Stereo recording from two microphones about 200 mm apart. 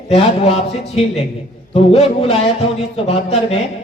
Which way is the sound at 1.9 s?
30° left (ahead or behind).